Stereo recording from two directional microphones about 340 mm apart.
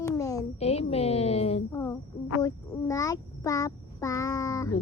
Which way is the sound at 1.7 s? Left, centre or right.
Centre.